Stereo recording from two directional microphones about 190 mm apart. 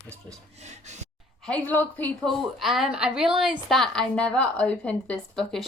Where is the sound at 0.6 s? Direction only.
40° right (ahead or behind).